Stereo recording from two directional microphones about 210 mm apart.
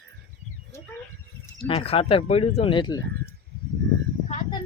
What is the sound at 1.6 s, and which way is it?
Speech, 25° left (ahead or behind).